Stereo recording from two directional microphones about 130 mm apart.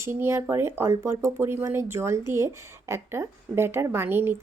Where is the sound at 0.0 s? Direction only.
20° right (ahead or behind).